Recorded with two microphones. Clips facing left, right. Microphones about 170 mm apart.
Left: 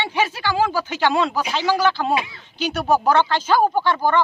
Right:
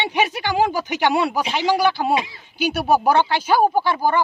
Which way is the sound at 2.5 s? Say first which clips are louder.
Right 1 dB; 10° right (ahead or behind).